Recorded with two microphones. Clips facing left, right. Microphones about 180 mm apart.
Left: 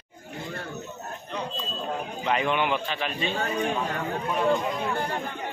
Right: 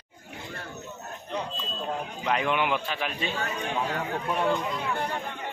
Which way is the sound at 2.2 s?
Centre (ahead or behind).